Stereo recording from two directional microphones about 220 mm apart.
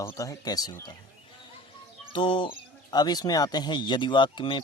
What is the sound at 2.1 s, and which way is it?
Speech, 25° left (ahead or behind).